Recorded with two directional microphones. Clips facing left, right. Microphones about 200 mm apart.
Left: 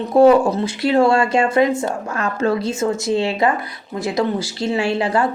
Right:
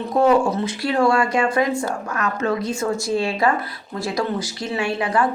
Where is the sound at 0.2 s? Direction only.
30° left (ahead or behind).